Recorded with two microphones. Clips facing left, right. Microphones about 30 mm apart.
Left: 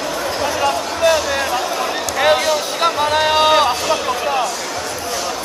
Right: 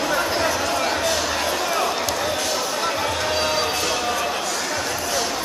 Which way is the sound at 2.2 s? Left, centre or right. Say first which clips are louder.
Left 8 dB; left.